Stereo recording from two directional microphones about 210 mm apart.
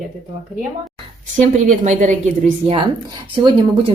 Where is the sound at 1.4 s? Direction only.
35° right (ahead or behind).